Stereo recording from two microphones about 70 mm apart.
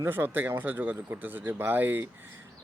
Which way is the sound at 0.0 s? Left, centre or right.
Right.